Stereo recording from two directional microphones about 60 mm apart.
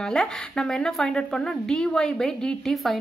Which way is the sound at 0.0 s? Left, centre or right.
Centre.